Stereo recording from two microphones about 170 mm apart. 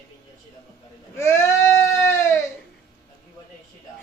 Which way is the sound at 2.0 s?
15° left (ahead or behind).